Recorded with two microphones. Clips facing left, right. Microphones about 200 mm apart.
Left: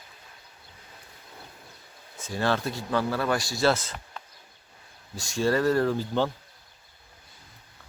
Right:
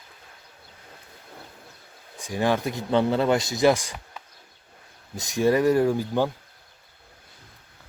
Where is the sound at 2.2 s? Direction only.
15° right (ahead or behind).